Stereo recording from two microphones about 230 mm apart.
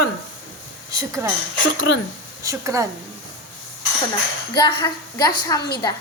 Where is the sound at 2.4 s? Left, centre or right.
Centre.